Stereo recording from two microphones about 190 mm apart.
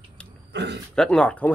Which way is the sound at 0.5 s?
65° right (ahead or behind).